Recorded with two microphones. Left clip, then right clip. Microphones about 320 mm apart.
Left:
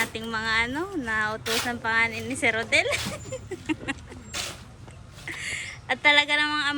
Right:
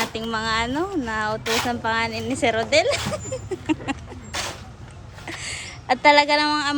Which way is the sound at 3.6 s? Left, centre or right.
Centre.